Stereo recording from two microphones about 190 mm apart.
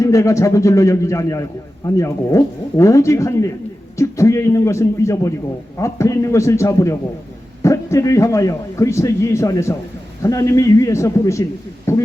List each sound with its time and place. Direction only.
0.0 s a man's voice: 15° left (ahead or behind)